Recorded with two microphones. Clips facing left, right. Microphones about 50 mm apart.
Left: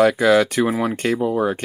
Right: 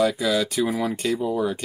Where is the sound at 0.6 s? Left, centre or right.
Left.